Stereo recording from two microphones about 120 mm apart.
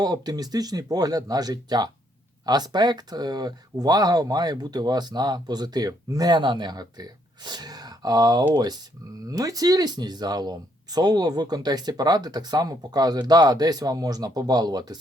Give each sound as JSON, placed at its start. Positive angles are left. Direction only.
{"t": 0.0, "sound": "speech", "side_deg": -35}